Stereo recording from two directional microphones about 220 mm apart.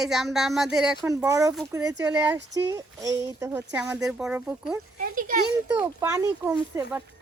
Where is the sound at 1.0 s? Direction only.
15° right (ahead or behind).